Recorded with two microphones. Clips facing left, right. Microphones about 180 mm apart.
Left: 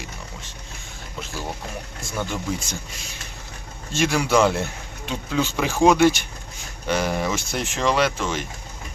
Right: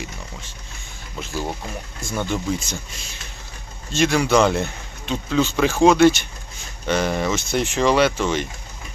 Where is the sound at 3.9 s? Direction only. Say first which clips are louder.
Right 2 dB; 5° left (ahead or behind).